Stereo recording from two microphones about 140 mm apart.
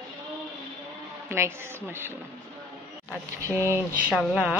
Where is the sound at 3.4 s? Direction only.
20° right (ahead or behind).